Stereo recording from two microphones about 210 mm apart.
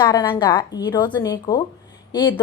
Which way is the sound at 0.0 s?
20° left (ahead or behind).